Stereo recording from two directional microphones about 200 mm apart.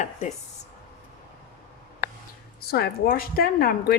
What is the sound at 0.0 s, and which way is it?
Speech, 35° left (ahead or behind).